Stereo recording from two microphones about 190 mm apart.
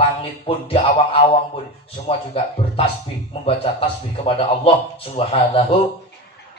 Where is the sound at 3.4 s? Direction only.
30° left (ahead or behind).